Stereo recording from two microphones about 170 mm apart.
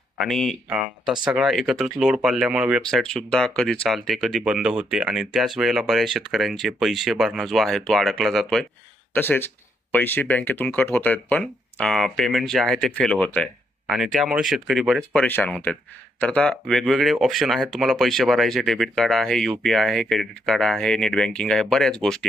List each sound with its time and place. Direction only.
0.2 s speech: centre (ahead or behind)
0.7 s speech: 10° right (ahead or behind)
9.1 s speech: 10° left (ahead or behind)